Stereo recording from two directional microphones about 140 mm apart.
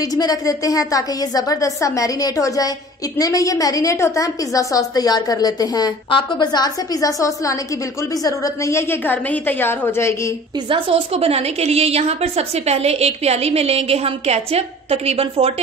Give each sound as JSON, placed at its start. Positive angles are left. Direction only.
{"t": 0.0, "sound": "a woman's voice", "side_deg": 25}
{"t": 10.7, "sound": "a woman's voice", "side_deg": -45}